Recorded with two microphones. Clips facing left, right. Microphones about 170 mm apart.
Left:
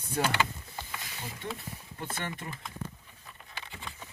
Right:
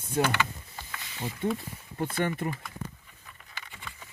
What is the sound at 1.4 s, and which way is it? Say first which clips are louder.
Speech: right 10 dB; 50° right (ahead or behind).